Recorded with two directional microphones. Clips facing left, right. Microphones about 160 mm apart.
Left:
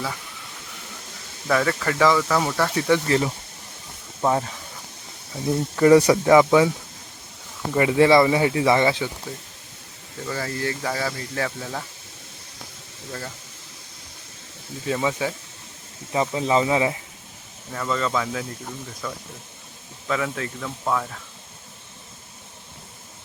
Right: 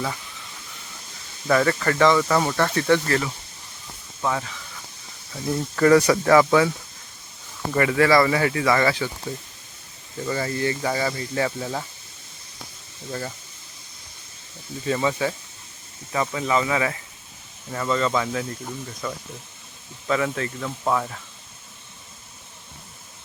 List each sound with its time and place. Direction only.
1.5 s speech: centre (ahead or behind)
3.1 s speech: 30° left (ahead or behind)
5.5 s speech: 15° left (ahead or behind)
7.8 s speech: 20° left (ahead or behind)
10.2 s speech: centre (ahead or behind)
13.1 s speech: 5° right (ahead or behind)
14.8 s speech: 5° left (ahead or behind)
16.1 s speech: 25° left (ahead or behind)
17.7 s speech: centre (ahead or behind)